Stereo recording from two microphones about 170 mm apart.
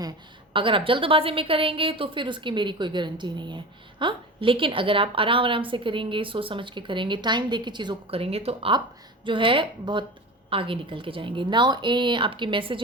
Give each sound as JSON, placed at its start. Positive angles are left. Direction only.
{"t": 0.5, "sound": "a woman's voice", "side_deg": -30}